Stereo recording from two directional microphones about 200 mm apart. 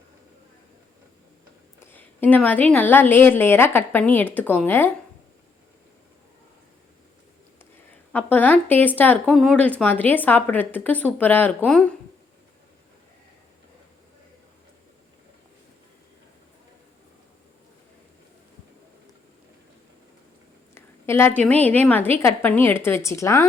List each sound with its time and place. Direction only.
1.8 s speech: 10° left (ahead or behind)
8.1 s speech: 10° left (ahead or behind)
20.7 s a woman's voice: 10° left (ahead or behind)